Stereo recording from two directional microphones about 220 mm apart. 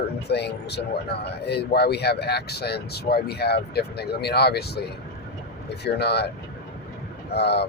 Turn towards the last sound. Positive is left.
turn(degrees=50)  # may be behind; listen again after turning